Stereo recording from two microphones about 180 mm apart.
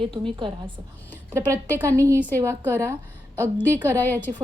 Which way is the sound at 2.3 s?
15° right (ahead or behind).